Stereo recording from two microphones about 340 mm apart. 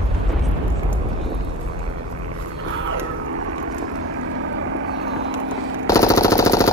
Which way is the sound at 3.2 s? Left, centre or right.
Right.